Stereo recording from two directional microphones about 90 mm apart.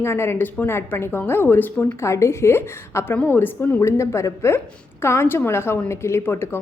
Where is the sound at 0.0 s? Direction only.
30° left (ahead or behind).